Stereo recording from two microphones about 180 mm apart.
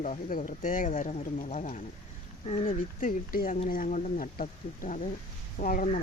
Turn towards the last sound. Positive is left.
turn(degrees=50)  # may be behind; listen again after turning